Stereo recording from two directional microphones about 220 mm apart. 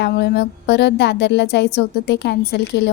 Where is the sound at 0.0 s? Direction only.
50° left (ahead or behind).